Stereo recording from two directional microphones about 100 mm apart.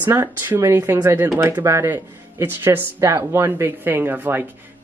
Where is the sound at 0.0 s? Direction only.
20° right (ahead or behind).